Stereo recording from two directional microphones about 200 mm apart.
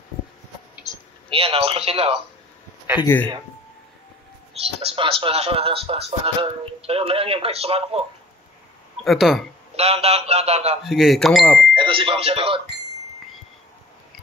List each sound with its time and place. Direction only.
1.3 s speech: 30° right (ahead or behind)
3.0 s speech: 10° left (ahead or behind)
4.7 s speech: 30° right (ahead or behind)
9.0 s speech: centre (ahead or behind)
9.8 s a sound: 30° right (ahead or behind)
10.8 s speech: centre (ahead or behind)
11.7 s speech: 25° right (ahead or behind)